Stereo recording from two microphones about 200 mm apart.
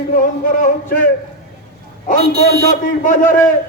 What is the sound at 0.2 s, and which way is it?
Speech, 40° left (ahead or behind).